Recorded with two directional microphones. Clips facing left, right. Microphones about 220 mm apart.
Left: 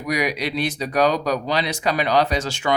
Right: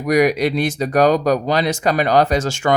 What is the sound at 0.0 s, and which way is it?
Speech, 45° right (ahead or behind).